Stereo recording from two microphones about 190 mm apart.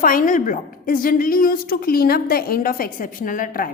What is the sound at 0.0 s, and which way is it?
A woman's voice, 45° left (ahead or behind).